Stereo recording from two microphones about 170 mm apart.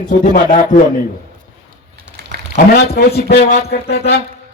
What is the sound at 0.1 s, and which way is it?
Speech, 50° left (ahead or behind).